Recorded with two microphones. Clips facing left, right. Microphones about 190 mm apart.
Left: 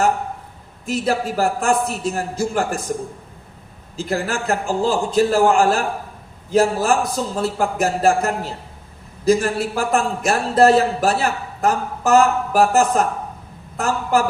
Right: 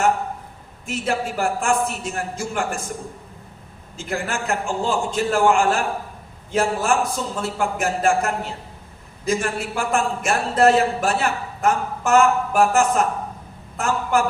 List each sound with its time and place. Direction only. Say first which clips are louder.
0.9 s a man's voice: left 4 dB; 35° left (ahead or behind)
3.9 s a man's voice: left 4 dB; 35° left (ahead or behind)